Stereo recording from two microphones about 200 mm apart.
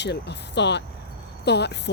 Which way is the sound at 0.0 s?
60° left (ahead or behind).